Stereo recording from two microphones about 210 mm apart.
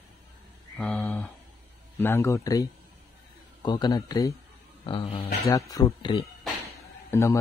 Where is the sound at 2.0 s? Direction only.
10° left (ahead or behind); by 5.6 s 25° left (ahead or behind).